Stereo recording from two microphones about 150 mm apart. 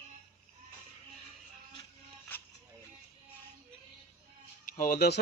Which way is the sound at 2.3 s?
15° left (ahead or behind).